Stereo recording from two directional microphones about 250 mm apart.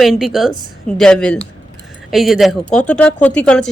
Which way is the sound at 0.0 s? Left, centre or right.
Centre.